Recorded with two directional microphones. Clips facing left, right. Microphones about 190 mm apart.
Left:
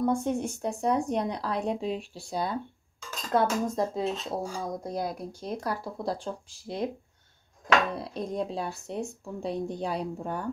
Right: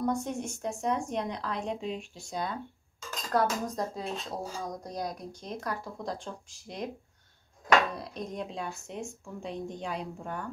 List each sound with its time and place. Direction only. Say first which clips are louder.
0.0 s speech: left 4 dB; 30° left (ahead or behind)
7.9 s speech: left 5 dB; 30° left (ahead or behind)